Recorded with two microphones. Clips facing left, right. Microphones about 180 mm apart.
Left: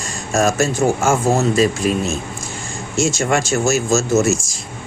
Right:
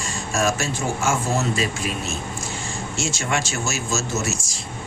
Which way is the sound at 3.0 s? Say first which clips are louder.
Left 8 dB; 45° left (ahead or behind).